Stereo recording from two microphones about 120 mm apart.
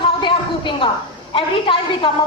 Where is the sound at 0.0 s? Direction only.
45° left (ahead or behind).